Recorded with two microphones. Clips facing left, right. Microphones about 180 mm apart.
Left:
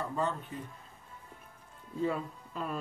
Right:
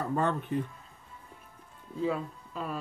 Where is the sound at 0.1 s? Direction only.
60° right (ahead or behind).